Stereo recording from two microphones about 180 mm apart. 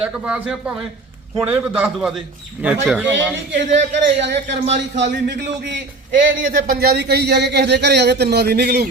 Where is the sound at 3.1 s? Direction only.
85° right.